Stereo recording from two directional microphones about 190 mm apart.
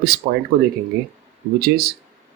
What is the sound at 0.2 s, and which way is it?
Speech, 50° right (ahead or behind).